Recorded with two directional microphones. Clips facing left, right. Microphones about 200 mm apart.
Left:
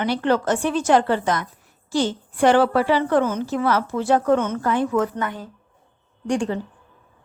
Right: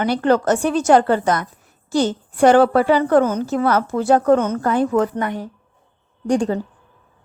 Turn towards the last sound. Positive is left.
turn(degrees=-40)  # may be behind; listen again after turning